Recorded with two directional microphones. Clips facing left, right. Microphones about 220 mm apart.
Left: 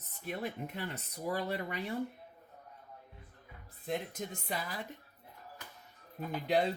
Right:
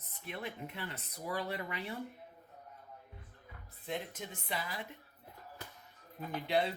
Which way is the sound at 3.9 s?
45° left (ahead or behind).